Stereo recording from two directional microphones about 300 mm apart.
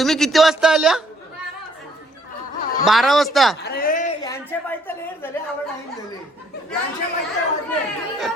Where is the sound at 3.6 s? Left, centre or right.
Left.